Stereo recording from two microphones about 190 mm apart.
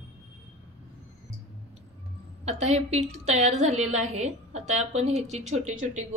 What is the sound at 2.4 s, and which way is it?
A woman's voice, 35° right (ahead or behind).